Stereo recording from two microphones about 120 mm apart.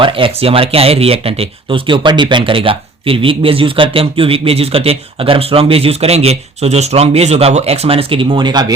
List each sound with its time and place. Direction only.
0.0 s speech: 50° right (ahead or behind)